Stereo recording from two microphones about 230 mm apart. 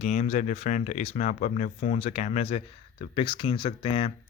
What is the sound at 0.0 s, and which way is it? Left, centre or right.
Speech, left.